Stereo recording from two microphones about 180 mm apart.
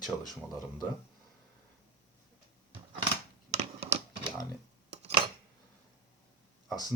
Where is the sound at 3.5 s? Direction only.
35° right (ahead or behind).